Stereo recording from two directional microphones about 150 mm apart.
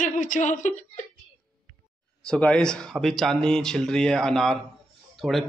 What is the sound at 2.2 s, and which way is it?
Speech, 5° left (ahead or behind).